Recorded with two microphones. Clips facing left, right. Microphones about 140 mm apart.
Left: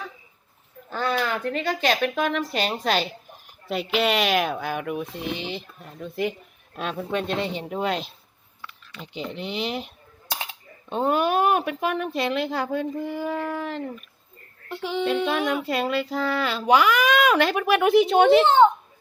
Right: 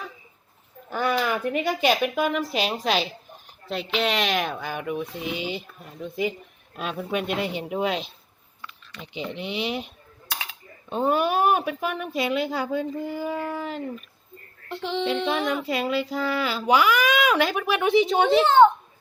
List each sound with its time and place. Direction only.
0.9 s a sound: 15° right (ahead or behind)
1.2 s speech: 10° right (ahead or behind)
3.7 s female singing: 5° left (ahead or behind)
6.7 s speech: 5° right (ahead or behind)
7.6 s female singing: 5° right (ahead or behind)
8.6 s speech: centre (ahead or behind)
10.8 s female singing: centre (ahead or behind)
18.4 s a child's voice: 20° left (ahead or behind)